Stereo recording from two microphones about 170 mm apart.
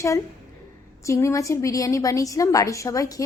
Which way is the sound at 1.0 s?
20° left (ahead or behind).